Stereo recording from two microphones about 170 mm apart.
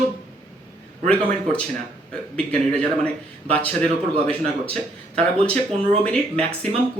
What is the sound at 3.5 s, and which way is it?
Speech, 10° left (ahead or behind).